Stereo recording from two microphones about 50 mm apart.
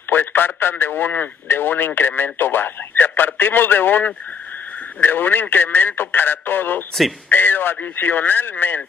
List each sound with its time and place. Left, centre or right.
0.1 s a man's voice: left